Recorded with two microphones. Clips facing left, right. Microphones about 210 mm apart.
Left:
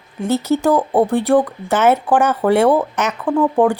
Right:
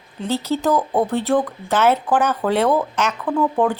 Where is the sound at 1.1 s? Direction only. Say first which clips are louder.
Left 4 dB; 15° left (ahead or behind).